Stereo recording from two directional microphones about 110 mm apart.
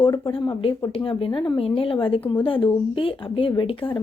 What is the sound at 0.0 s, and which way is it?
Speech, 50° left (ahead or behind).